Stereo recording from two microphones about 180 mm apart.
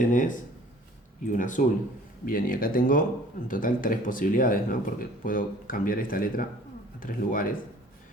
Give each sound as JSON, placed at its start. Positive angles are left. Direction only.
{"t": 0.1, "sound": "speech", "side_deg": 45}